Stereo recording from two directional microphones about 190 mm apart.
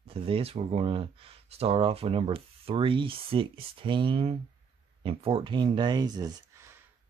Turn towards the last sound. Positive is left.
turn(degrees=-20)  # may be behind; listen again after turning